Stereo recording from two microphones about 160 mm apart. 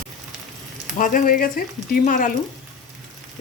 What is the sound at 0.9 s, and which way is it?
Speech, 55° left (ahead or behind).